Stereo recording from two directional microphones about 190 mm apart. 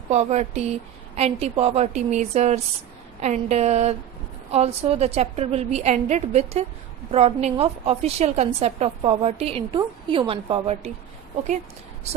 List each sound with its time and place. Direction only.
0.1 s a woman's voice: 35° right (ahead or behind)